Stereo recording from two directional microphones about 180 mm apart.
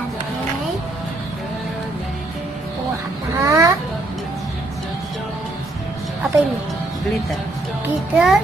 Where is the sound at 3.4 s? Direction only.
20° right (ahead or behind).